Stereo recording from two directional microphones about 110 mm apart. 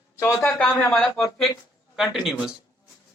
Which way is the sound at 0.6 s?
5° left (ahead or behind).